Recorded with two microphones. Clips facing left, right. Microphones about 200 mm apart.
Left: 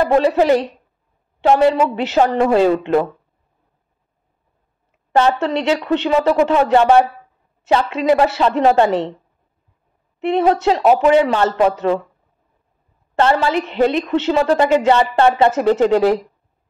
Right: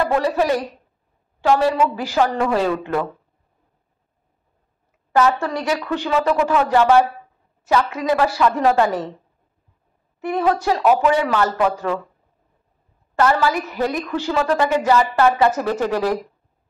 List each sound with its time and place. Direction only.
0.0 s a woman's voice: 25° left (ahead or behind)
5.1 s a woman's voice: 25° left (ahead or behind)
10.2 s a woman's voice: 25° left (ahead or behind)
13.2 s a woman's voice: 25° left (ahead or behind)